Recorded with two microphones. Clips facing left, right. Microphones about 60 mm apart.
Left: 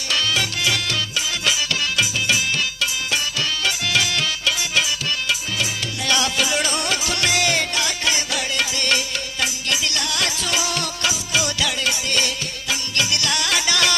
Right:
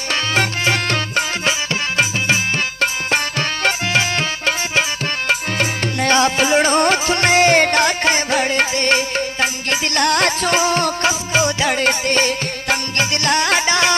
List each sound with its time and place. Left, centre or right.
0.1 s music: right